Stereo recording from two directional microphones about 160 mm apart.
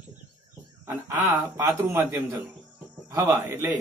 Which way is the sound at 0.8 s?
15° right (ahead or behind).